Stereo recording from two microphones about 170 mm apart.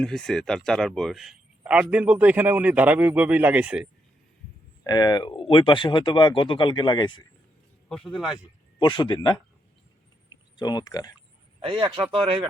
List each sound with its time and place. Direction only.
0.0 s a man's voice: 5° left (ahead or behind)
4.8 s speech: 25° left (ahead or behind)
7.9 s speech: centre (ahead or behind)
8.8 s speech: 30° left (ahead or behind)
10.6 s speech: 25° left (ahead or behind)
11.6 s speech: 30° right (ahead or behind)